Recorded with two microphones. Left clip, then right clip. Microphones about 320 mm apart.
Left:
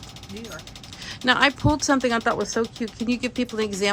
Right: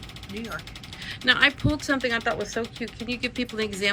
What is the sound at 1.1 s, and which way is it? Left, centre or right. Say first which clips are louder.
Speech: left 1 dB; centre.